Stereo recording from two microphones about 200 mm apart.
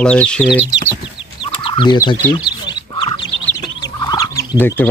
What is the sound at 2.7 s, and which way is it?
Duck, 20° left (ahead or behind).